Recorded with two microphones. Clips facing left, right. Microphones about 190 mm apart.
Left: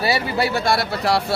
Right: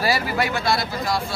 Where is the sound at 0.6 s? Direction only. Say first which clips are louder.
Left 3 dB; 65° left (ahead or behind).